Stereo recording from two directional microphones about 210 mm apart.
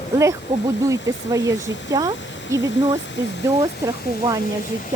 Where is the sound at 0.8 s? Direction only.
15° right (ahead or behind).